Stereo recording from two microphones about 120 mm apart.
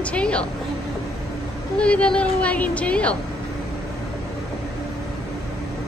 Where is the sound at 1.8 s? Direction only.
10° left (ahead or behind).